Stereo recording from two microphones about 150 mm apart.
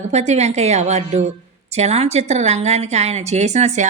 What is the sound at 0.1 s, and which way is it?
A woman's voice, 45° right (ahead or behind).